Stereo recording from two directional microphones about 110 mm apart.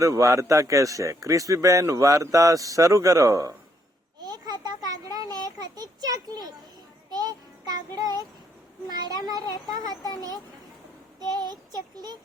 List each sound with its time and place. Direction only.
0.0 s a man's voice: 30° right (ahead or behind)
4.2 s a sound: 35° right (ahead or behind)
7.1 s child singing: 35° right (ahead or behind)
9.2 s child singing: 35° right (ahead or behind)
11.2 s child singing: 40° right (ahead or behind)